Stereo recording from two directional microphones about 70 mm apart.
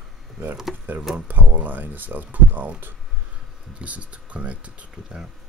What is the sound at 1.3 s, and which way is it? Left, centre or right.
Speech, right.